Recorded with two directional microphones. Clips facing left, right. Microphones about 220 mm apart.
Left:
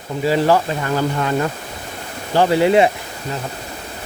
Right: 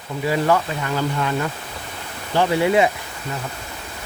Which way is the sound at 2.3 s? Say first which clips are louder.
Left 4 dB; 30° left (ahead or behind).